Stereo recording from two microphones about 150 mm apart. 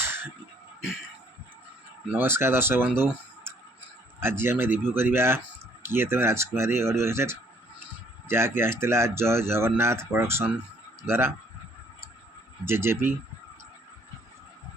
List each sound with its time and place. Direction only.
0.0 s a sound: 15° right (ahead or behind)
2.1 s speech: 15° right (ahead or behind)
12.6 s speech: 15° right (ahead or behind)